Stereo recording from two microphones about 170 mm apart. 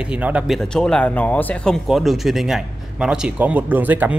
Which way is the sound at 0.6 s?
5° left (ahead or behind).